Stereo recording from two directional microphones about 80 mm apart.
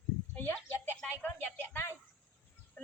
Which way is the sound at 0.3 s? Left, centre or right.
Left.